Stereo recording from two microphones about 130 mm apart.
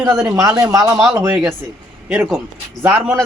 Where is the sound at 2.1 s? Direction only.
Centre (ahead or behind).